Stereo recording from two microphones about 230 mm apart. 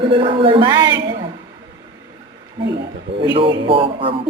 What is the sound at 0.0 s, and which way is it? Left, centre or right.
Speech, right.